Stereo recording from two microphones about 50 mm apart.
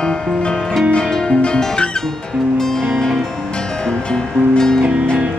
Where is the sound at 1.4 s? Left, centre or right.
Centre.